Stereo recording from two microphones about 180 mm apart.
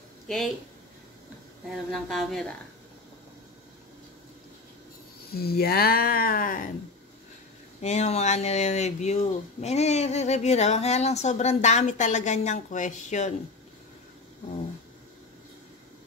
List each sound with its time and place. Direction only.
1.9 s speech: centre (ahead or behind)
5.3 s speech: 60° left (ahead or behind)
7.8 s speech: 40° left (ahead or behind)